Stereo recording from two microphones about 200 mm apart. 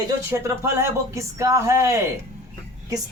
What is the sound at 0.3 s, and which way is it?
Speech, 15° right (ahead or behind).